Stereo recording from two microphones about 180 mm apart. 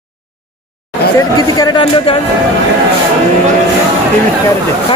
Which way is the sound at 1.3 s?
25° left (ahead or behind).